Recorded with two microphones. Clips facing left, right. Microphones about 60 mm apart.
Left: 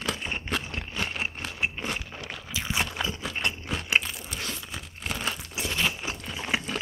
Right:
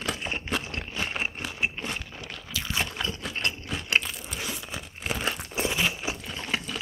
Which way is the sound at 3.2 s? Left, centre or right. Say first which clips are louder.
Left 1 dB; centre.